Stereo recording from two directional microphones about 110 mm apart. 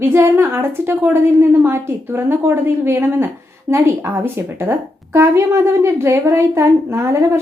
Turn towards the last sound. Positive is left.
turn(degrees=-25)  # may be behind; listen again after turning